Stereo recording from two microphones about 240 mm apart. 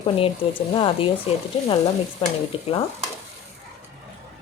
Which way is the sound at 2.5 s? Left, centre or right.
Left.